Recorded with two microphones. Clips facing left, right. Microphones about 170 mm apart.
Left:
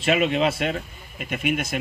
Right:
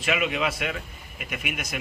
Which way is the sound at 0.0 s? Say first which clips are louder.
Left 5 dB; 30° left (ahead or behind).